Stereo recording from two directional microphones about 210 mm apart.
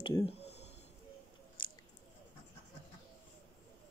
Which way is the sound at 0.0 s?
25° left (ahead or behind).